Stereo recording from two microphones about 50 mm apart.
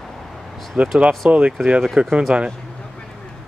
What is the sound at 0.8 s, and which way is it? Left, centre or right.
Speech, right.